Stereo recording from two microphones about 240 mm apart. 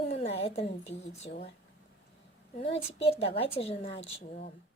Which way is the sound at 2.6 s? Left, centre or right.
Left.